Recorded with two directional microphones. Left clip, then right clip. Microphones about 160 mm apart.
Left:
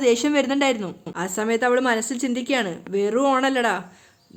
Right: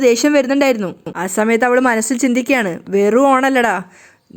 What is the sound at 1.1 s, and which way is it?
A woman's voice, 35° right (ahead or behind).